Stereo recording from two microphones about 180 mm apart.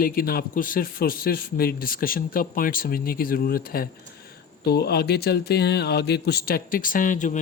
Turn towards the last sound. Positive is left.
turn(degrees=45)  # may be behind; listen again after turning